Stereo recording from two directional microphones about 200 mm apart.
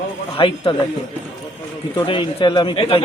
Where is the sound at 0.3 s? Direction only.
25° left (ahead or behind).